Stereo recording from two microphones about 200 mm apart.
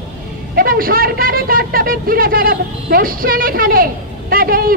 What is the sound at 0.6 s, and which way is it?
A man's voice, 45° right (ahead or behind).